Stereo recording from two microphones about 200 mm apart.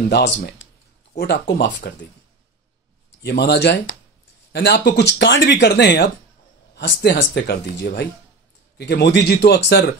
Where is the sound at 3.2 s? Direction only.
55° left (ahead or behind).